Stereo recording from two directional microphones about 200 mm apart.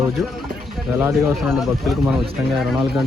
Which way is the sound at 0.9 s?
10° right (ahead or behind).